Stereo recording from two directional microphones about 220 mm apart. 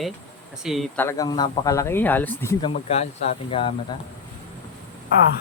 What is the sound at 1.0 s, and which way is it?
Speech, 15° left (ahead or behind).